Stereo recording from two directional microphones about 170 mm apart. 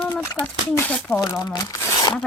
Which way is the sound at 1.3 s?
20° left (ahead or behind).